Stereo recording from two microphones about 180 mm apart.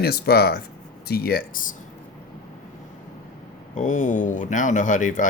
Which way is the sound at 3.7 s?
45° left (ahead or behind).